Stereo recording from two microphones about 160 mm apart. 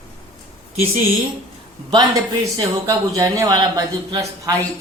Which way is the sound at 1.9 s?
25° right (ahead or behind).